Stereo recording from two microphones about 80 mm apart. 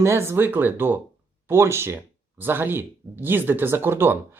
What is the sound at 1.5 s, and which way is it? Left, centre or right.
Speech, right.